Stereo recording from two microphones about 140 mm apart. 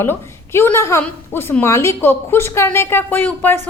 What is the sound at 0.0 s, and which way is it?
A woman's voice, 15° left (ahead or behind).